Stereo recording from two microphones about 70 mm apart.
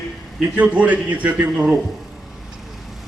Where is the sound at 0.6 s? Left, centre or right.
Right.